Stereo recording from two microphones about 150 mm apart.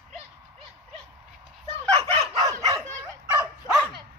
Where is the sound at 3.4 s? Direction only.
Centre (ahead or behind).